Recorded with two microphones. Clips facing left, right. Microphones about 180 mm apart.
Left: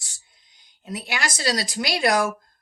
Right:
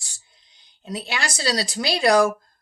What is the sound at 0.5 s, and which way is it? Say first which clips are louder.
Speech: right 2 dB; 25° right (ahead or behind).